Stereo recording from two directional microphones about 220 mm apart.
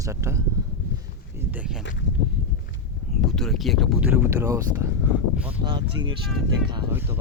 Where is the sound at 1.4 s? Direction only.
5° right (ahead or behind).